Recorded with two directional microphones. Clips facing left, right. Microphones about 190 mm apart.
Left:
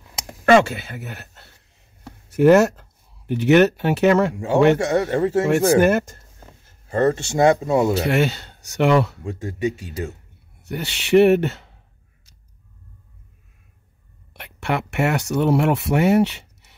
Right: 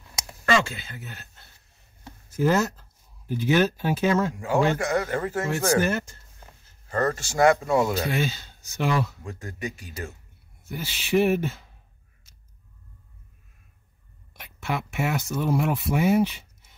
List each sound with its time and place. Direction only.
0.3 s speech: 60° left (ahead or behind)
4.7 s speech: 25° left (ahead or behind)
5.8 s speech: 55° left (ahead or behind)
6.9 s speech: 25° left (ahead or behind)
8.0 s speech: 70° left (ahead or behind)
9.2 s speech: 25° left (ahead or behind)
10.6 s speech: 70° left (ahead or behind)
14.3 s speech: 65° left (ahead or behind)